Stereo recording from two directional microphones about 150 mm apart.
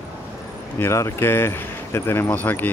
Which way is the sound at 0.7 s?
20° left (ahead or behind).